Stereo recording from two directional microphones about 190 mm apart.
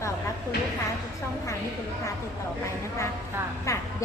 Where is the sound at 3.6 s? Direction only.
15° left (ahead or behind).